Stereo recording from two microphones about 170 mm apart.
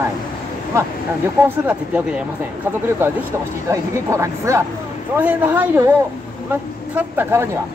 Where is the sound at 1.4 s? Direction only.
10° right (ahead or behind).